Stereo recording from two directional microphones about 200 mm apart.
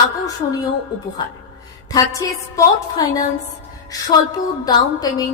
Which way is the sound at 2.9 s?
20° left (ahead or behind).